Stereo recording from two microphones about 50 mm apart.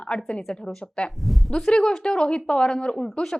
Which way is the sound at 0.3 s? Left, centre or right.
Centre.